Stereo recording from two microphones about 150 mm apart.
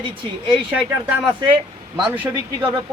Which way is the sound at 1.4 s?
30° right (ahead or behind).